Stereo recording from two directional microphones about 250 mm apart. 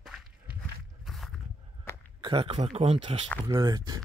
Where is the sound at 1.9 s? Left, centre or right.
Centre.